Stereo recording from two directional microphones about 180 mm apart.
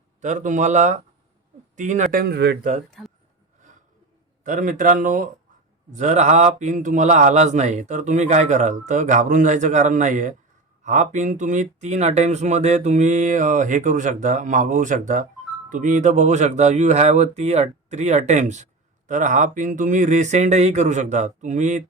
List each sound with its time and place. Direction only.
0.2 s speech: 45° right (ahead or behind)
2.2 s speech: 65° right (ahead or behind)
4.4 s speech: 45° right (ahead or behind)